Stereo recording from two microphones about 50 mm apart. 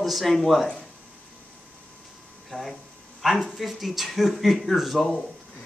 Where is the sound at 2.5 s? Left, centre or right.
Right.